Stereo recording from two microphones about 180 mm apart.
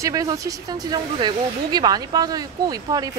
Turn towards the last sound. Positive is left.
turn(degrees=-20)  # may be behind; listen again after turning